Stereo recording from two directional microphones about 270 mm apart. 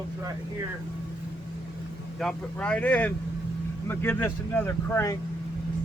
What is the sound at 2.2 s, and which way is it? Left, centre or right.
Speech, centre.